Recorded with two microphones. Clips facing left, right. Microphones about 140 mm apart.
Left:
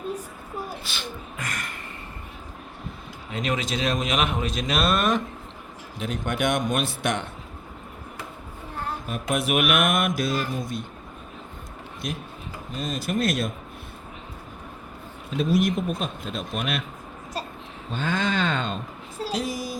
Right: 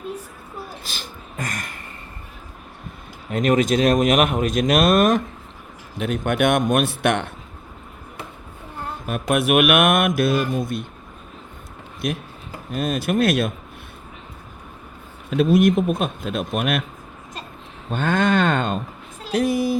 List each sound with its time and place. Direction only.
0.9 s beatboxing: 40° right (ahead or behind)
3.3 s speech: 50° right (ahead or behind)
6.0 s speech: 60° right (ahead or behind)
9.0 s speech: 60° right (ahead or behind)
12.0 s speech: 60° right (ahead or behind)
15.3 s speech: 60° right (ahead or behind)
17.9 s speech: 55° right (ahead or behind)